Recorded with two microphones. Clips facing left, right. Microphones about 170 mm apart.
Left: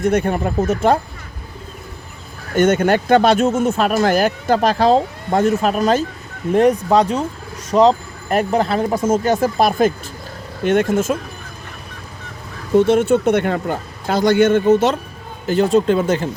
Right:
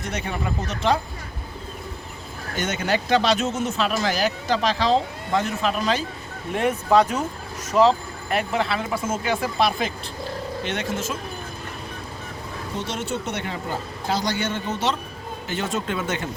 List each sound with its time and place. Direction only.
0.0 s speech: 55° left (ahead or behind)
2.6 s speech: 50° left (ahead or behind)
12.7 s speech: 55° left (ahead or behind)
15.4 s speech: 35° left (ahead or behind)